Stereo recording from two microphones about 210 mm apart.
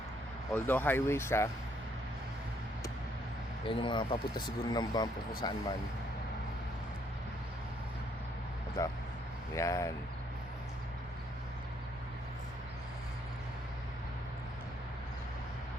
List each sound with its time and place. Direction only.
0.5 s speech: 10° left (ahead or behind)
3.7 s speech: 25° left (ahead or behind)
8.8 s speech: 15° left (ahead or behind)